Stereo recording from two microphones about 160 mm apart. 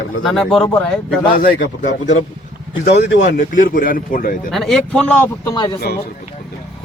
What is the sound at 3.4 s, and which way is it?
Speech, 55° left (ahead or behind).